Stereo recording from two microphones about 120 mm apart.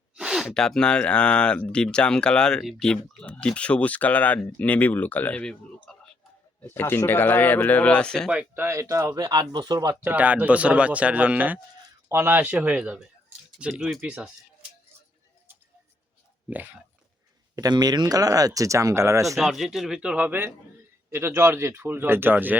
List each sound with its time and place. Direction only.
0.2 s speech: 5° right (ahead or behind)
8.3 s speech: 15° right (ahead or behind); by 10.0 s 35° right (ahead or behind)
10.0 s speech: 15° right (ahead or behind)
16.5 s speech: 15° right (ahead or behind)
17.5 s speech: 35° right (ahead or behind)
19.4 s speech: centre (ahead or behind)